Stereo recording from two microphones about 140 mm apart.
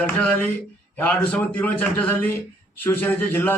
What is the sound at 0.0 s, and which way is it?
A man's voice, 10° left (ahead or behind).